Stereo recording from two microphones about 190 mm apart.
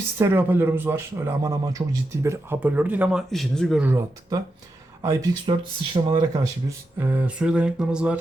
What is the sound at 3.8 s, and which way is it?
Speech, 15° right (ahead or behind).